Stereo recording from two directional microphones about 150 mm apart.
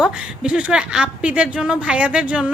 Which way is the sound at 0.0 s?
5° right (ahead or behind).